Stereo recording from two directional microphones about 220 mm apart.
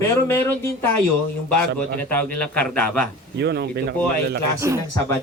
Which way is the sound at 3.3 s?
50° right (ahead or behind).